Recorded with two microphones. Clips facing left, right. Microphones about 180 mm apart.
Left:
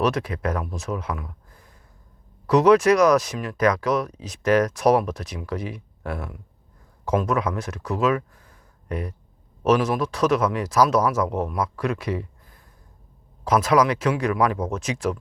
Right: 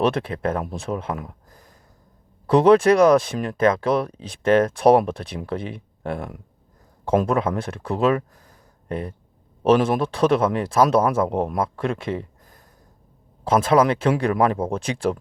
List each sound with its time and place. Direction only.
0.0 s speech: 30° right (ahead or behind)
2.5 s speech: 30° right (ahead or behind)
13.4 s speech: 30° right (ahead or behind)